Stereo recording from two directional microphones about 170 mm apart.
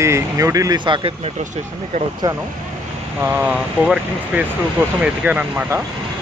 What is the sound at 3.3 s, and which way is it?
Speech, 5° right (ahead or behind).